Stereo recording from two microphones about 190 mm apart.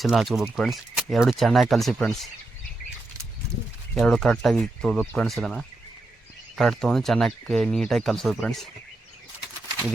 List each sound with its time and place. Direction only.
0.0 s speech: centre (ahead or behind)
3.9 s speech: 5° left (ahead or behind)